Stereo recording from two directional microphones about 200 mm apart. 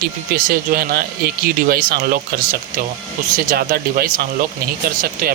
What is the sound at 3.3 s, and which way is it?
Speech, 45° right (ahead or behind).